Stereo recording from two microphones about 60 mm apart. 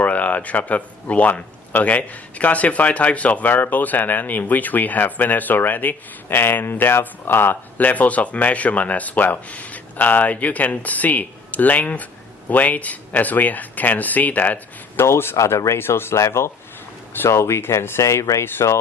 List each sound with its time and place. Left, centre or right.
0.0 s speech: left
14.9 s speech: left